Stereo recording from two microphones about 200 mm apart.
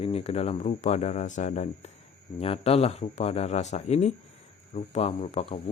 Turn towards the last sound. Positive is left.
turn(degrees=30)  # may be behind; listen again after turning